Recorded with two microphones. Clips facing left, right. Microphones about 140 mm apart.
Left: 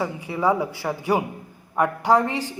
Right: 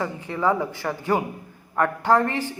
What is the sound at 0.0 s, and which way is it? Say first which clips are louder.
A man's voice: left 1 dB; 10° left (ahead or behind).